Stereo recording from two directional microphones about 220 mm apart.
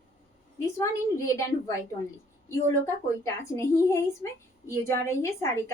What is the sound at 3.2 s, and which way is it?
A woman's voice, 10° left (ahead or behind).